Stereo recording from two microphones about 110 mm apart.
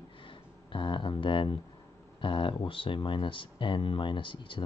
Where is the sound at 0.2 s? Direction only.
50° left (ahead or behind).